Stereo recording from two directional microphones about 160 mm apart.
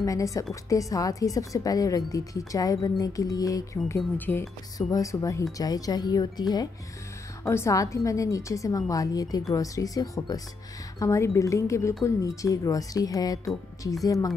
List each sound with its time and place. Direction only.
0.0 s speech: 20° left (ahead or behind)